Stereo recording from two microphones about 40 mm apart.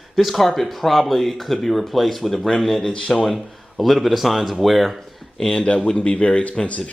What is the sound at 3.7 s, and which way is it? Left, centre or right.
Speech, centre.